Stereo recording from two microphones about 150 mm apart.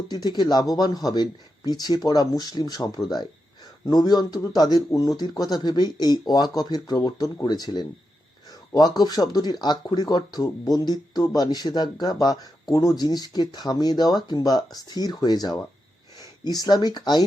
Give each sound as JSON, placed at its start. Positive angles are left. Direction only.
{"t": 0.1, "sound": "speech", "side_deg": 25}